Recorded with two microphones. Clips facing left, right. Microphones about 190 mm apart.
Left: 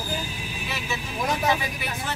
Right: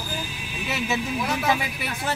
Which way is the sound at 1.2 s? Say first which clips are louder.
Left 1 dB; 40° left (ahead or behind).